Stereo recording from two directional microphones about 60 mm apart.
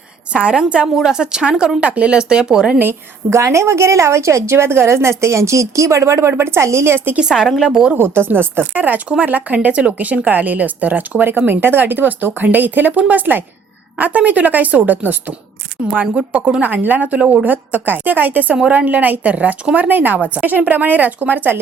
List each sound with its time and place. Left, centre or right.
0.3 s speech: centre
3.2 s a woman's voice: right
7.2 s speech: centre
7.9 s speech: right